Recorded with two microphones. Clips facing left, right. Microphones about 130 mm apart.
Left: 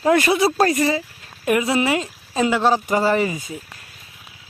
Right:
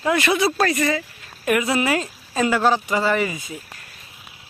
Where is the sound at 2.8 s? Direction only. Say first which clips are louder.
Left 2 dB; 40° left (ahead or behind).